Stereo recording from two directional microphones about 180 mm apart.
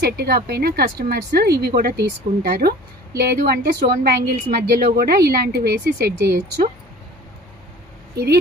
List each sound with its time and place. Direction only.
0.0 s speech: 60° right (ahead or behind)